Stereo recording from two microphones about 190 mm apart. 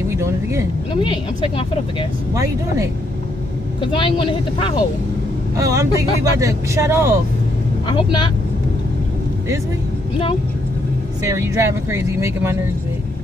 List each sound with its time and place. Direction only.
0.1 s speech: 15° right (ahead or behind)
1.0 s speech: 25° left (ahead or behind)
3.8 s speech: 25° left (ahead or behind)
5.6 s speech: 15° right (ahead or behind)
7.9 s speech: 25° left (ahead or behind)
11.2 s speech: 15° right (ahead or behind)